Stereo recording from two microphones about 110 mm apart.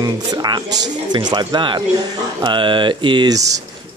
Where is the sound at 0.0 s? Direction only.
40° right (ahead or behind).